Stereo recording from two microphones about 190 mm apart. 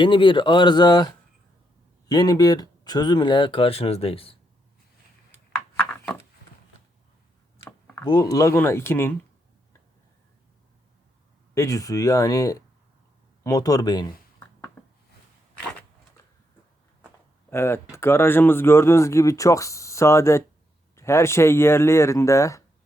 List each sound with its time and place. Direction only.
0.0 s speech: 25° left (ahead or behind)
7.6 s speech: 15° left (ahead or behind)
11.5 s speech: 15° left (ahead or behind)
13.4 s a sound: 20° left (ahead or behind)
17.5 s speech: 15° left (ahead or behind)